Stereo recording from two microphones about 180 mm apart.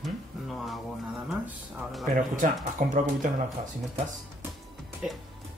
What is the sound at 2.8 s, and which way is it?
Speech, 50° right (ahead or behind).